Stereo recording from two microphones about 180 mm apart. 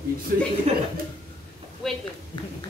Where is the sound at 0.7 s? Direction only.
35° right (ahead or behind).